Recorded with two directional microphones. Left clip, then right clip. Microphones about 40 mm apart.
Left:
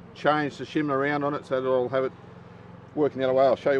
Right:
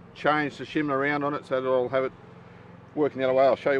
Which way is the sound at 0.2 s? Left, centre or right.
Right.